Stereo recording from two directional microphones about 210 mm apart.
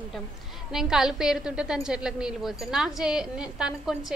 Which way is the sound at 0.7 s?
Centre (ahead or behind).